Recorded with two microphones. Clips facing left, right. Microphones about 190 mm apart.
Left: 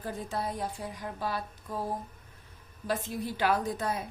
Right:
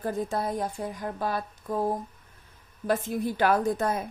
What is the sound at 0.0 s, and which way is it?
A woman's voice, 45° right (ahead or behind).